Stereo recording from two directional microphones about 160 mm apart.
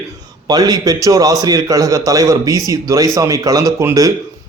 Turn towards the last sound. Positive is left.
turn(degrees=-20)  # may be behind; listen again after turning